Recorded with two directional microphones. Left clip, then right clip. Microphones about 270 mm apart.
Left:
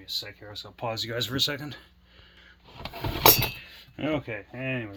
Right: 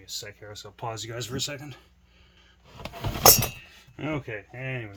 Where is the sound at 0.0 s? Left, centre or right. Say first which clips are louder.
Left 4 dB; centre; by 1.8 s left.